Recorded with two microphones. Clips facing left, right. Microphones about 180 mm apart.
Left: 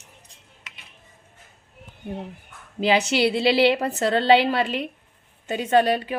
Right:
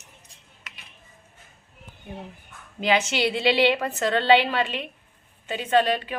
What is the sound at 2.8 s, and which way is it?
A woman's voice, 35° left (ahead or behind).